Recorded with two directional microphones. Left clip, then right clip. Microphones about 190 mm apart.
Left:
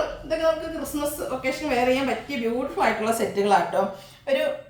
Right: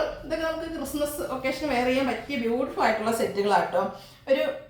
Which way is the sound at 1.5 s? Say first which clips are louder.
Left 3 dB; 20° left (ahead or behind).